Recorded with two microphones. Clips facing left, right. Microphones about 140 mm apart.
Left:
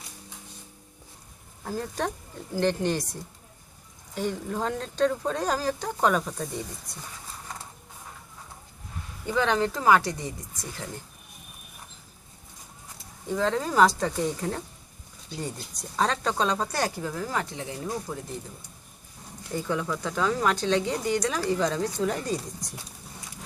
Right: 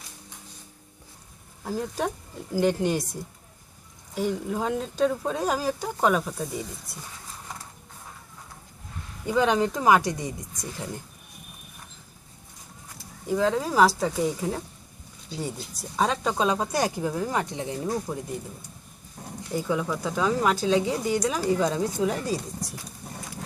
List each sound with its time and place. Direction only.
1.6 s speech: 5° right (ahead or behind)
4.1 s speech: 5° right (ahead or behind)
9.2 s speech: 15° right (ahead or behind)
13.2 s speech: 5° right (ahead or behind)
19.5 s speech: 10° right (ahead or behind)